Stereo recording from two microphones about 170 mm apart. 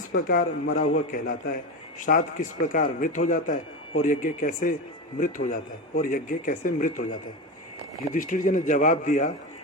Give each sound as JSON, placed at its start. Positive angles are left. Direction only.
{"t": 0.1, "sound": "a man's voice", "side_deg": 55}
{"t": 6.0, "sound": "a man's voice", "side_deg": 50}
{"t": 8.1, "sound": "a man's voice", "side_deg": 50}